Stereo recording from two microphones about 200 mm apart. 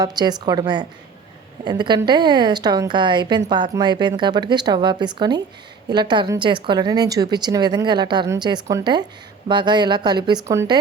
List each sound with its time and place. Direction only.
0.0 s a woman's voice: 20° right (ahead or behind)